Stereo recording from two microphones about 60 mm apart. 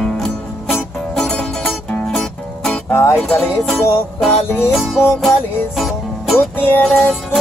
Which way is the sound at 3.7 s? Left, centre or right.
Centre.